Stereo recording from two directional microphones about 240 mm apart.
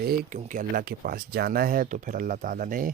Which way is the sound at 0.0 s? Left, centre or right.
Right.